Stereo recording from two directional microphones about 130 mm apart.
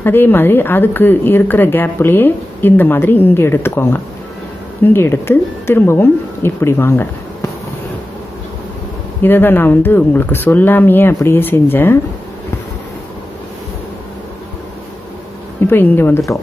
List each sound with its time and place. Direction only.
0.0 s a woman's voice: 15° left (ahead or behind)
9.2 s a woman's voice: 15° left (ahead or behind)
15.6 s a woman's voice: 15° left (ahead or behind)